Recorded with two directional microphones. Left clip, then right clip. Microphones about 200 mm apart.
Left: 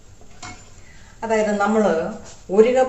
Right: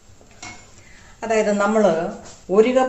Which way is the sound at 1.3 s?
40° right (ahead or behind).